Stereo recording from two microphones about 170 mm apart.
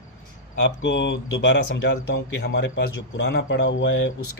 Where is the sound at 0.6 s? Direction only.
90° left.